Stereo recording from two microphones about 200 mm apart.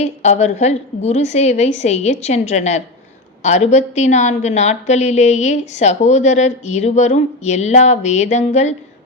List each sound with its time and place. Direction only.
0.0 s a woman's voice: 35° left (ahead or behind)